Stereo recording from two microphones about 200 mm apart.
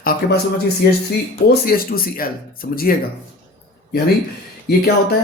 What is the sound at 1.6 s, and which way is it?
Speech, 50° left (ahead or behind).